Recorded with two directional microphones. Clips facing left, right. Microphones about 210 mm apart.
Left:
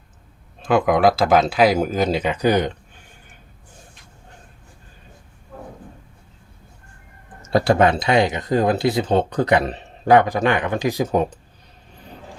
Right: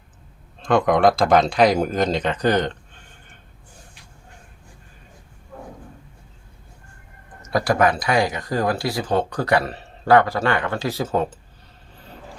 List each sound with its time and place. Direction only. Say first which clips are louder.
0.6 s speech: even; 5° left (ahead or behind)
7.5 s speech: left 3 dB; 25° left (ahead or behind)